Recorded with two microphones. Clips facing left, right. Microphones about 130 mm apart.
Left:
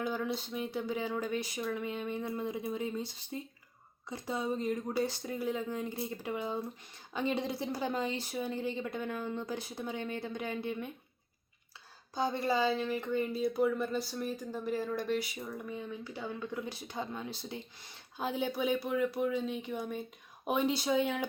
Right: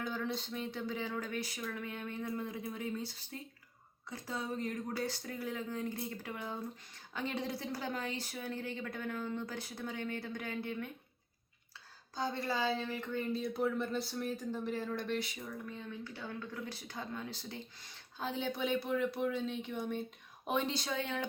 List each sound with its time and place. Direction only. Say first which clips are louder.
0.0 s speech: left 4 dB; 10° left (ahead or behind)
12.1 s speech: left 5 dB; 15° left (ahead or behind)